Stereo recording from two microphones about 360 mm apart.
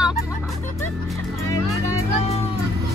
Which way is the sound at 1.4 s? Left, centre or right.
Right.